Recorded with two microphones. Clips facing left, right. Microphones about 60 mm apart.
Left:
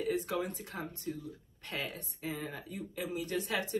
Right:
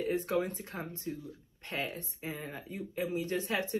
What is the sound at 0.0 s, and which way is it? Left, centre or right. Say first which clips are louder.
Speech: right 2 dB; right.